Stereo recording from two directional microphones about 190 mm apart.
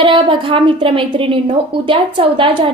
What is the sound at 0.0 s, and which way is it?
A woman's voice, 25° right (ahead or behind).